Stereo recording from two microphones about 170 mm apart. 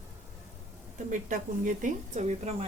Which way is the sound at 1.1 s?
50° right (ahead or behind).